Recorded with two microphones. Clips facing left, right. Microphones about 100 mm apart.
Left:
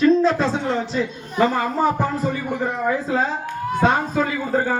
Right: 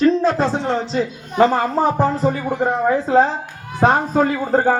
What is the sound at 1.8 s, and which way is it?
Speech, 30° right (ahead or behind).